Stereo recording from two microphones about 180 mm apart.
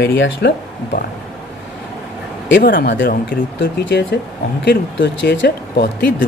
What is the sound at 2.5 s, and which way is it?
Speech, 55° left (ahead or behind).